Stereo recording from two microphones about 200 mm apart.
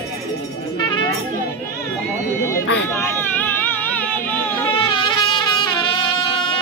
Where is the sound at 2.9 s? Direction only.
10° left (ahead or behind).